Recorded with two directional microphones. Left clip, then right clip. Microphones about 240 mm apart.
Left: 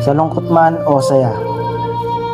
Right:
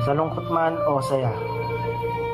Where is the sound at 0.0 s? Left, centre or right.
Left.